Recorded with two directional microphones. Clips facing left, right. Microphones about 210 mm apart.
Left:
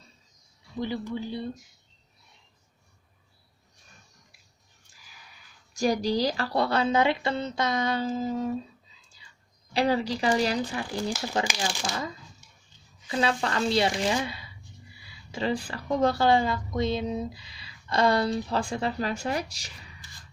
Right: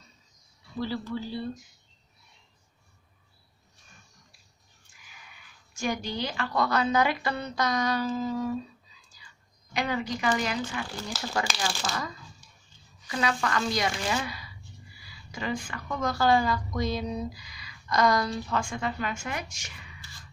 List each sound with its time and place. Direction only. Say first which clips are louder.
0.7 s speech: left 1 dB; 20° left (ahead or behind)
5.8 s a woman's voice: left 6 dB; 35° left (ahead or behind)
9.8 s speech: left 5 dB; 35° left (ahead or behind)
11.4 s a woman's voice: left 1 dB; 15° left (ahead or behind); by 19.9 s 35° left (ahead or behind)